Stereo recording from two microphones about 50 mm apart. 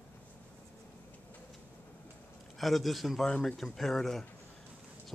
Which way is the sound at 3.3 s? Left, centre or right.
Centre.